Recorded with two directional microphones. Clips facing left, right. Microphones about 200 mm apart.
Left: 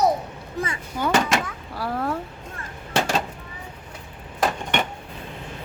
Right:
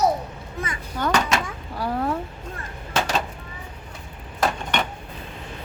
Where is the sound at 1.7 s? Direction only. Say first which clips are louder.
Right 2 dB; centre (ahead or behind).